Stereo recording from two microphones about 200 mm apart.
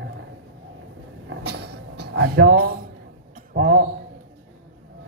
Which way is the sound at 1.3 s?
55° right (ahead or behind).